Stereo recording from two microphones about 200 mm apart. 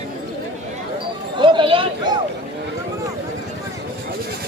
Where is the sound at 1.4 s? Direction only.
25° right (ahead or behind).